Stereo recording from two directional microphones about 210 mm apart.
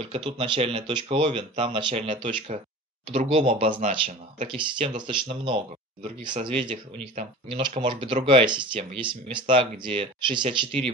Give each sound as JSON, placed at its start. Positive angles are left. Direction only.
{"t": 0.0, "sound": "speech", "side_deg": -25}